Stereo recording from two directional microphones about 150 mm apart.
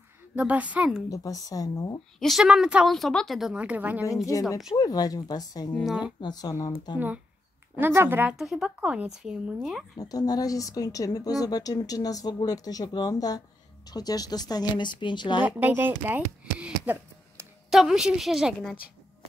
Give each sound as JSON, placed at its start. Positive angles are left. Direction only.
{"t": 0.4, "sound": "speech", "side_deg": -10}
{"t": 1.1, "sound": "speech", "side_deg": 20}
{"t": 2.1, "sound": "a woman's voice", "side_deg": 0}
{"t": 4.3, "sound": "speech", "side_deg": 20}
{"t": 5.8, "sound": "a woman's voice", "side_deg": -5}
{"t": 6.2, "sound": "speech", "side_deg": 25}
{"t": 7.7, "sound": "speech", "side_deg": -15}
{"t": 9.9, "sound": "speech", "side_deg": 25}
{"t": 15.4, "sound": "a woman's voice", "side_deg": -10}